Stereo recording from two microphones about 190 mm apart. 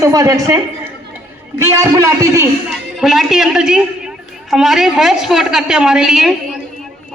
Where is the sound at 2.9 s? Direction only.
Centre (ahead or behind).